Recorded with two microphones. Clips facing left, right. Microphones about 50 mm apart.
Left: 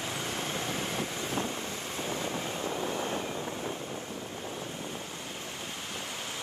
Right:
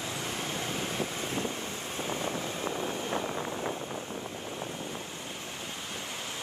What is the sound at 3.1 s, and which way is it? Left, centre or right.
Vehicle, right.